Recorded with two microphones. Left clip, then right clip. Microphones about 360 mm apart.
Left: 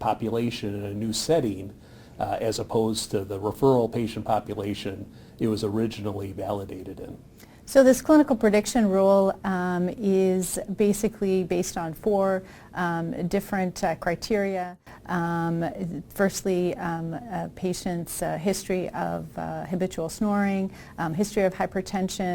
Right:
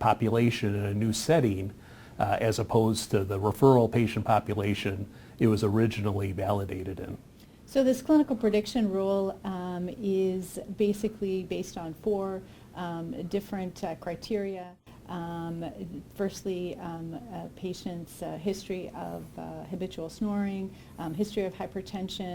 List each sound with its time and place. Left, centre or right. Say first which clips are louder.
0.0 s speech: right 1 dB; right
7.7 s a woman's voice: left 7 dB; left